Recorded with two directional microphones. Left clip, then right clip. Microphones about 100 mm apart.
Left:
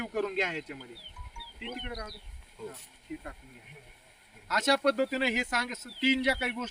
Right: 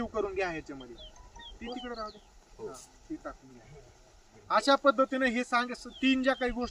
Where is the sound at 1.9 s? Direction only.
40° left (ahead or behind).